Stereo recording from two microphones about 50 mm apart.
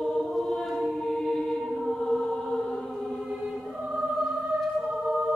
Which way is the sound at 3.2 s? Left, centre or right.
Centre.